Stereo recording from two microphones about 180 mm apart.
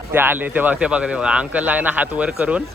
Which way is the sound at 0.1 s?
10° right (ahead or behind).